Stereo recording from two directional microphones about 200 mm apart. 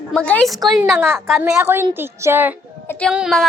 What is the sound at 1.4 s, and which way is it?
A woman's voice, 10° right (ahead or behind).